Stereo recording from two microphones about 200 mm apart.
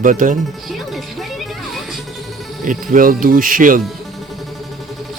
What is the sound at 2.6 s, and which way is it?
Speech, 40° right (ahead or behind).